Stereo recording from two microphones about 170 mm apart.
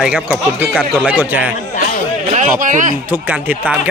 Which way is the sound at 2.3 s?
50° right (ahead or behind).